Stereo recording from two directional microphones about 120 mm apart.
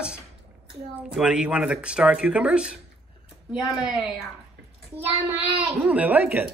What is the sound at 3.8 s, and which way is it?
Speech, 5° right (ahead or behind).